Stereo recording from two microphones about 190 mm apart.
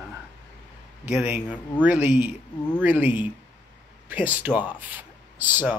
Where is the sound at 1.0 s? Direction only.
10° right (ahead or behind).